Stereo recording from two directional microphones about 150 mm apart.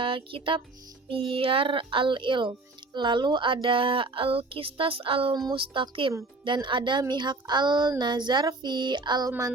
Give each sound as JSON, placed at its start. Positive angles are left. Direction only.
{"t": 0.0, "sound": "speech", "side_deg": -35}